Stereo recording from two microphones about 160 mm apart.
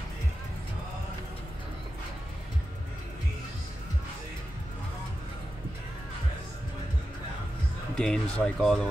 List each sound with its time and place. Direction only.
8.0 s speech: 5° left (ahead or behind)